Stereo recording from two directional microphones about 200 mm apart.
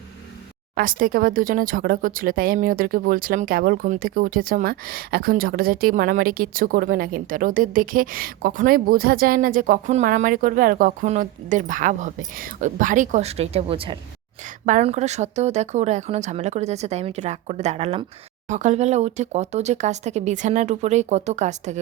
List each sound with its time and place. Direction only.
0.8 s speech: 45° right (ahead or behind)